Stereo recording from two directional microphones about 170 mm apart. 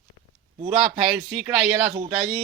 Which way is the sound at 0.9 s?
Centre (ahead or behind).